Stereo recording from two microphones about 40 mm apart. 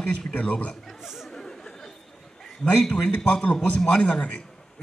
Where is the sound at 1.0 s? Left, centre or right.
Centre.